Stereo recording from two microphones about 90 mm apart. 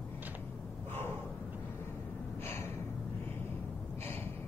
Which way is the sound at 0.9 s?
25° left (ahead or behind).